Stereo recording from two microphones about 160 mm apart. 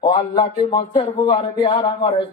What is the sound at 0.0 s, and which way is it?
A man's voice, 30° left (ahead or behind).